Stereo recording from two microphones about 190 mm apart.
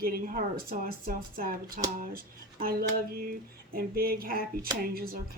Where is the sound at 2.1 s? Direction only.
50° right (ahead or behind).